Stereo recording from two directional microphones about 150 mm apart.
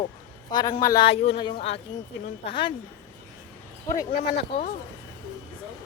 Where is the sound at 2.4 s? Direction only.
35° left (ahead or behind).